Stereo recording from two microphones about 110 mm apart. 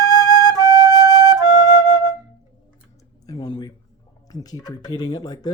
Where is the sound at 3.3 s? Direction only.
40° left (ahead or behind).